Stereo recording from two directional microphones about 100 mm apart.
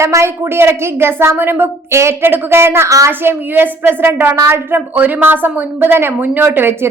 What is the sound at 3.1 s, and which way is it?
A woman's voice, 20° right (ahead or behind).